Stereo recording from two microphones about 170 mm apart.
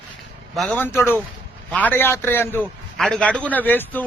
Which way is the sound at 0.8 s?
15° left (ahead or behind).